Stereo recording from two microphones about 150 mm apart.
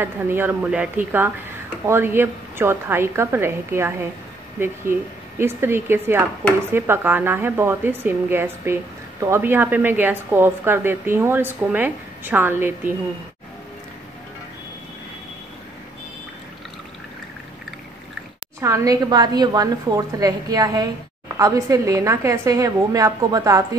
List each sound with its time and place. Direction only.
0.0 s a woman's voice: 15° right (ahead or behind)
18.6 s a woman's voice: 20° right (ahead or behind)